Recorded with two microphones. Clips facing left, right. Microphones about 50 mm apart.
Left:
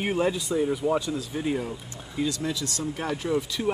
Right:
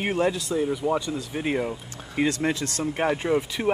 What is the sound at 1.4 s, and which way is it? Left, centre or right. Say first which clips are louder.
Speech: right 5 dB; right.